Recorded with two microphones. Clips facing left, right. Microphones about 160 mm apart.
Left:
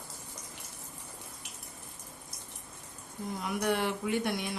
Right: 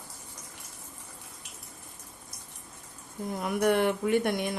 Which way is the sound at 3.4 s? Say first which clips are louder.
Right 6 dB; 55° right (ahead or behind).